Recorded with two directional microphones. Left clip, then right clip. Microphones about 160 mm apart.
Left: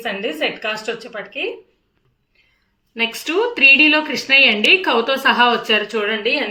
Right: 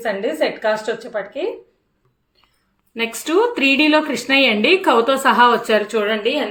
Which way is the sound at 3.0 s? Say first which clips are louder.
Right 1 dB; 40° right (ahead or behind).